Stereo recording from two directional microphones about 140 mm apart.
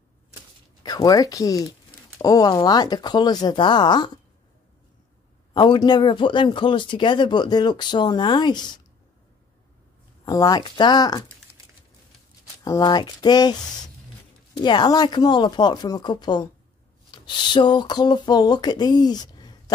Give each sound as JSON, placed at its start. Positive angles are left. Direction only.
{"t": 0.8, "sound": "speech", "side_deg": 25}
{"t": 5.5, "sound": "a man's voice", "side_deg": 30}
{"t": 10.2, "sound": "speech", "side_deg": 25}
{"t": 12.6, "sound": "speech", "side_deg": 30}
{"t": 14.6, "sound": "a man's voice", "side_deg": 30}